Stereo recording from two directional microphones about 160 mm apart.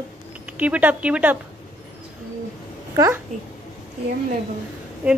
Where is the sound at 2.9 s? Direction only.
20° right (ahead or behind).